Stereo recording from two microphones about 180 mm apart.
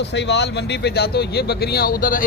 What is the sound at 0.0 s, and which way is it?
Speech, 75° left (ahead or behind).